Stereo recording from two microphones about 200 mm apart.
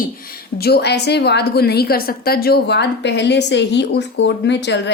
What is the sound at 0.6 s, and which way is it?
A woman's voice, 55° left (ahead or behind).